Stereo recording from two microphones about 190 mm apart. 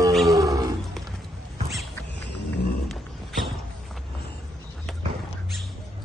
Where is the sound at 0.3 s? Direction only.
15° right (ahead or behind).